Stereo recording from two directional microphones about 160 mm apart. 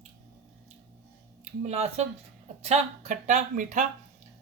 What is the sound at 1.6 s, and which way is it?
Speech, 40° right (ahead or behind).